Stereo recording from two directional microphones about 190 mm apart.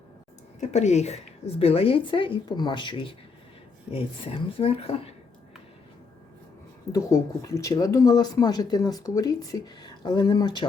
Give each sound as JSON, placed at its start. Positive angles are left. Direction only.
{"t": 0.6, "sound": "speech", "side_deg": 35}
{"t": 6.9, "sound": "speech", "side_deg": 15}